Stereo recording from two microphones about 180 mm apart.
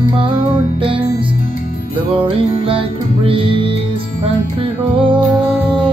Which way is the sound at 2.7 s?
30° right (ahead or behind).